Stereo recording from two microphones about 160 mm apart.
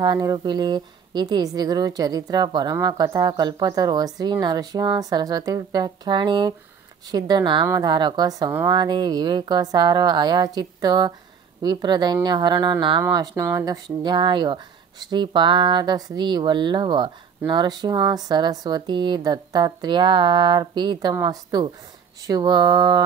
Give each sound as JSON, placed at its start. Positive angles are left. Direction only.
{"t": 0.0, "sound": "a woman's voice", "side_deg": -25}